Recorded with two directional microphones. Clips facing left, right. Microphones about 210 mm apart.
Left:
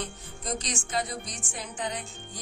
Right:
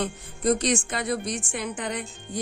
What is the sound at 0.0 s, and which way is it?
A woman's voice, 60° right (ahead or behind).